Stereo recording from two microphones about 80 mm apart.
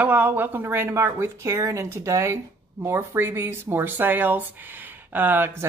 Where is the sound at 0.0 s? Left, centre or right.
Right.